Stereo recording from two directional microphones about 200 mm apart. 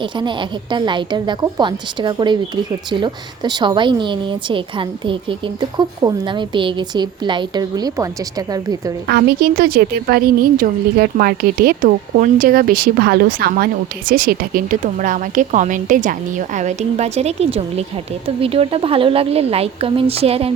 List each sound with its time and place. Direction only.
0.0 s speech: 25° right (ahead or behind)
9.0 s a woman's voice: 50° right (ahead or behind); by 20.5 s 30° right (ahead or behind)